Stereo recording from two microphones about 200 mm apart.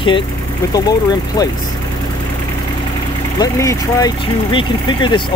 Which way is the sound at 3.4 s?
15° left (ahead or behind).